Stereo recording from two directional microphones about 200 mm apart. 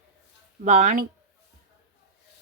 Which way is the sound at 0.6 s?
40° right (ahead or behind).